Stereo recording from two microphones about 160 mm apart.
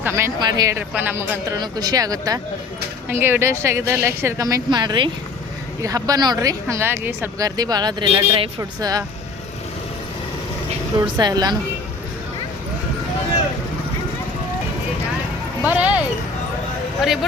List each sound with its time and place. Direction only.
0.0 s speech: 15° right (ahead or behind)
1.5 s speech: 25° right (ahead or behind)
11.0 s speech: 25° right (ahead or behind)
15.6 s speech: 10° right (ahead or behind)